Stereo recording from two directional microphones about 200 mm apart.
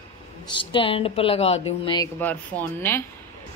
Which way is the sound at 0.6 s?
25° left (ahead or behind).